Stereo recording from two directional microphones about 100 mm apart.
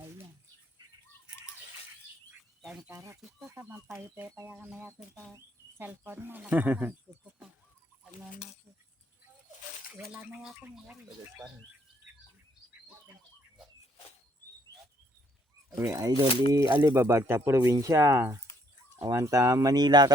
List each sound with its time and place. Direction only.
2.6 s a sound: 5° right (ahead or behind)
2.9 s speech: 35° right (ahead or behind); by 6.9 s 15° right (ahead or behind)
10.1 s speech: 15° right (ahead or behind)
15.8 s speech: 30° right (ahead or behind)